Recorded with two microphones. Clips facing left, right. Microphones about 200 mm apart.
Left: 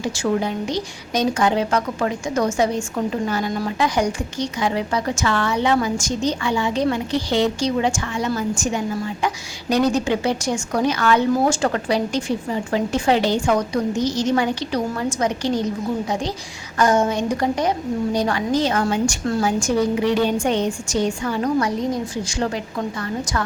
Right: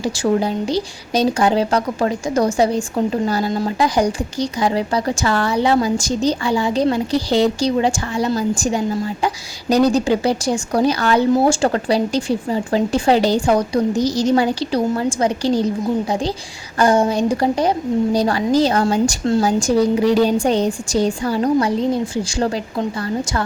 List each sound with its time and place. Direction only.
0.0 s speech: 35° right (ahead or behind)